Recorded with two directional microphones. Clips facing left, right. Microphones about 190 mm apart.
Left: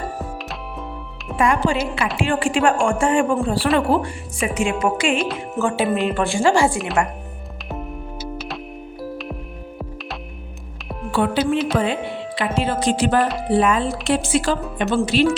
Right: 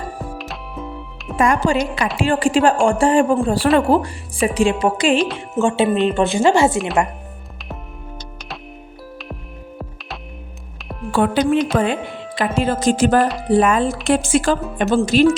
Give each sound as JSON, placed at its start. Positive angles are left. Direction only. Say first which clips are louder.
{"t": 0.3, "sound": "music", "louder": "right 1 dB", "side_deg": 0}
{"t": 1.4, "sound": "a woman's voice", "louder": "right 2 dB", "side_deg": -45}
{"t": 6.7, "sound": "speech", "louder": "right 3 dB", "side_deg": 0}
{"t": 11.3, "sound": "a woman's voice", "louder": "right 4 dB", "side_deg": 5}
{"t": 11.8, "sound": "speech", "louder": "right 2 dB", "side_deg": -45}